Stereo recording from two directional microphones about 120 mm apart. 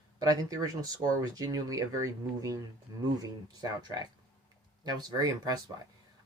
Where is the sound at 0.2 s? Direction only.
30° right (ahead or behind).